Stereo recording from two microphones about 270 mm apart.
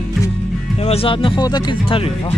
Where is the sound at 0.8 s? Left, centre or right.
Left.